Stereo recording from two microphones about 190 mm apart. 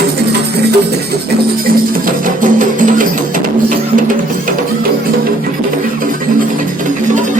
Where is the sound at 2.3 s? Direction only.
45° right (ahead or behind).